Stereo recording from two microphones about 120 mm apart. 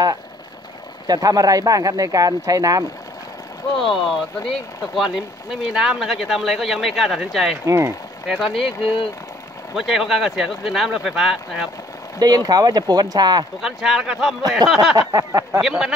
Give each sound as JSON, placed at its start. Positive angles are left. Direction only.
{"t": 1.0, "sound": "speech", "side_deg": -30}
{"t": 3.7, "sound": "speech", "side_deg": 0}
{"t": 7.6, "sound": "speech", "side_deg": -25}
{"t": 8.4, "sound": "speech", "side_deg": 0}
{"t": 9.8, "sound": "speech", "side_deg": 0}
{"t": 12.2, "sound": "speech", "side_deg": -30}
{"t": 13.6, "sound": "speech", "side_deg": -5}
{"t": 15.0, "sound": "a sound", "side_deg": -25}
{"t": 15.6, "sound": "speech", "side_deg": -5}